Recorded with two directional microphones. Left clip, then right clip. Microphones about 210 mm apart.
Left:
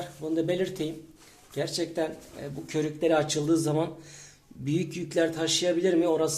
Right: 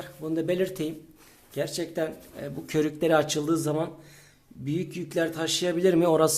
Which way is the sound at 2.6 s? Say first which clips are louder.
Right 2 dB; 35° right (ahead or behind).